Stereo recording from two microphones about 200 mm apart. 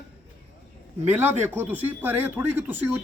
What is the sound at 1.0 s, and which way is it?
A man's voice, 10° right (ahead or behind).